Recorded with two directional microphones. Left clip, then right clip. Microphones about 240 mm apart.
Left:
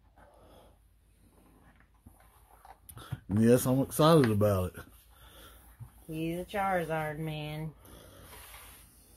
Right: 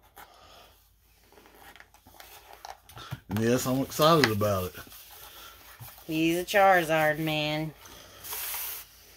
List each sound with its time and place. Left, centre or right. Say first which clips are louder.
3.0 s speech: even; left
6.1 s speech: right 10 dB; right